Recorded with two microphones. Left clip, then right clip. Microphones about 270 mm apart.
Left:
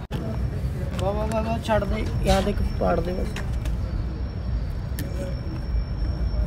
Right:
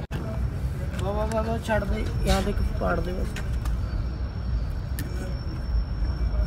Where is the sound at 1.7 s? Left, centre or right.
Centre.